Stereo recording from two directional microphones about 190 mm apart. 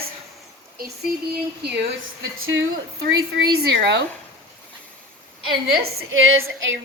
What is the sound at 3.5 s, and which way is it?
Speech, 60° right (ahead or behind).